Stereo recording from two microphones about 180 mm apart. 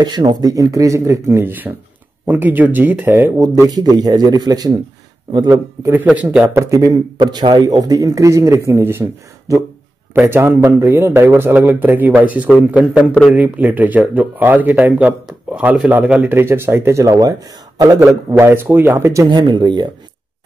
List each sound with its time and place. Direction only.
0.0 s speech: 25° right (ahead or behind)